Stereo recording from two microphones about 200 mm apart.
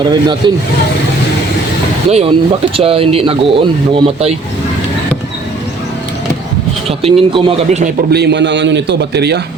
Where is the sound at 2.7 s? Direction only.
30° right (ahead or behind).